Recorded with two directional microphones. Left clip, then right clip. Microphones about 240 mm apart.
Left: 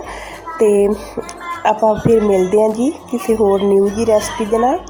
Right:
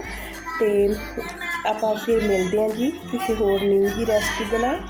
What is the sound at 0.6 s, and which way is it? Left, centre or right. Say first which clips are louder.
Speech: left 8 dB; left.